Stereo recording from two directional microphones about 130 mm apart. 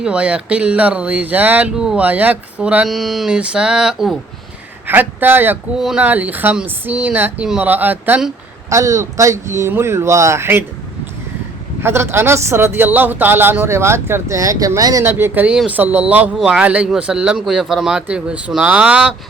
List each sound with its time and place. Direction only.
0.0 s speech: 10° right (ahead or behind)
4.9 s speech: 15° right (ahead or behind)
5.7 s a woman's voice: 5° right (ahead or behind)
11.8 s a woman's voice: 20° right (ahead or behind)